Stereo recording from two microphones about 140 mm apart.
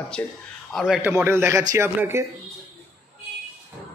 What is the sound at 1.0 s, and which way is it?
Speech, 15° right (ahead or behind).